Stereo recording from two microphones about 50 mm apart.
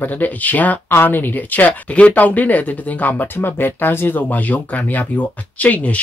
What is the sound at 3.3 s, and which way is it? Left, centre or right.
Speech, left.